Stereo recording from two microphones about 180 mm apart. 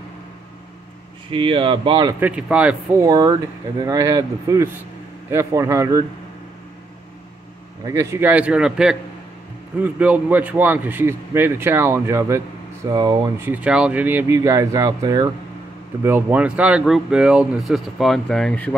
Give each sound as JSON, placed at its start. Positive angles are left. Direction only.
{"t": 1.3, "sound": "speech", "side_deg": -30}
{"t": 2.1, "sound": "a man's voice", "side_deg": -10}
{"t": 3.0, "sound": "a man's voice", "side_deg": -20}
{"t": 7.8, "sound": "a man's voice", "side_deg": -15}
{"t": 13.5, "sound": "a man's voice", "side_deg": -5}